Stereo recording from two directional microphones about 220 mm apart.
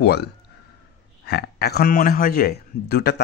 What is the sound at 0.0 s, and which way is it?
A man's voice, 45° left (ahead or behind).